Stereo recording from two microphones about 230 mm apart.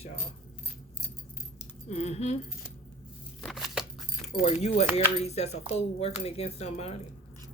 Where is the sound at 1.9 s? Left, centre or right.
Left.